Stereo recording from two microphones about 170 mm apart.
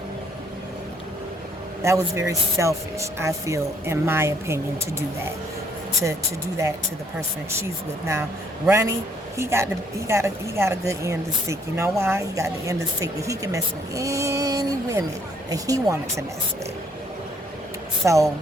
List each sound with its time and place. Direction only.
1.8 s speech: 15° right (ahead or behind)
7.6 s speech: 15° right (ahead or behind)
18.0 s speech: 20° right (ahead or behind)